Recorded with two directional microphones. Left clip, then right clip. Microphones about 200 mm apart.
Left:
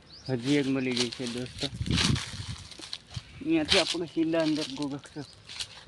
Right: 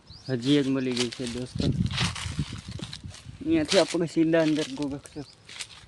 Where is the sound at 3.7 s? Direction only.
55° right (ahead or behind).